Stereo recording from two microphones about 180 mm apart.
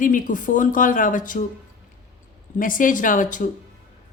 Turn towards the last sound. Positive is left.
turn(degrees=45)  # may be behind; listen again after turning